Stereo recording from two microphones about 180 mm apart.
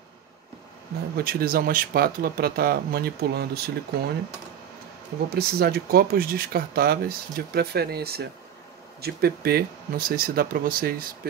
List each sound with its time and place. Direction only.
1.1 s speech: 55° right (ahead or behind)
5.3 s speech: 60° right (ahead or behind)